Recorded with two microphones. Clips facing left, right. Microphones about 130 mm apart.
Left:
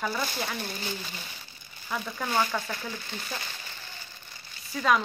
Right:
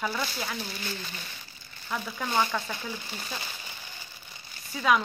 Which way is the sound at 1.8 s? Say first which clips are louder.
Even; centre (ahead or behind).